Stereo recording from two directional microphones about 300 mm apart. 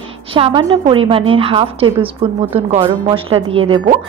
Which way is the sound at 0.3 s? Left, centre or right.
Centre.